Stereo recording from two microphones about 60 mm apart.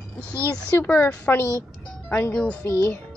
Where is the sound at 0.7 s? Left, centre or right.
Left.